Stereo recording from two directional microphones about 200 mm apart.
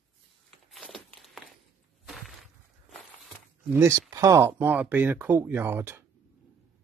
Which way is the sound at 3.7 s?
15° right (ahead or behind).